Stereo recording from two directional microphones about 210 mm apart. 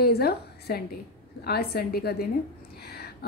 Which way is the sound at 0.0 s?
50° left (ahead or behind).